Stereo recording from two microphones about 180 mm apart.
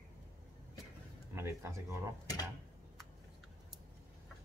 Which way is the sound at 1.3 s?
15° right (ahead or behind).